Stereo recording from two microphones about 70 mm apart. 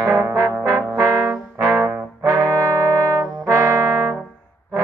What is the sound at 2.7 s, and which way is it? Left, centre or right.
Brass instrument, right.